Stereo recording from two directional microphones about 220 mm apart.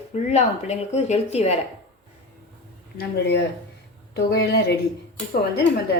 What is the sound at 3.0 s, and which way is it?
A woman's voice, 50° left (ahead or behind).